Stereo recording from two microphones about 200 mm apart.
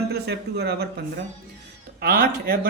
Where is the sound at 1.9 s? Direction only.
50° right (ahead or behind).